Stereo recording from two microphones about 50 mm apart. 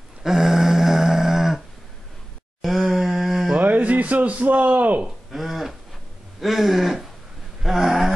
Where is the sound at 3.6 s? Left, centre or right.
Right.